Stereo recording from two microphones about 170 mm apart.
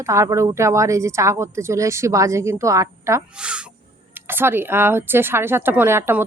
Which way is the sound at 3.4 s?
5° right (ahead or behind).